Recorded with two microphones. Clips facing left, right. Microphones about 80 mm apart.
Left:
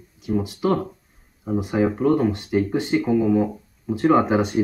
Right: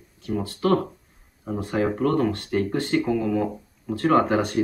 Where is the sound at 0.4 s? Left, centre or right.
Centre.